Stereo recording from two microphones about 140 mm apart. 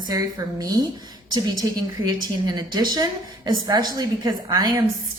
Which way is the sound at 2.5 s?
30° right (ahead or behind).